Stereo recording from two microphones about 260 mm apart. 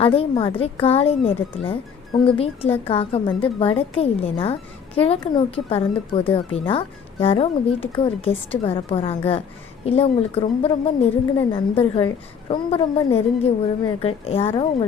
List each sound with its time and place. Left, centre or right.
0.0 s speech: left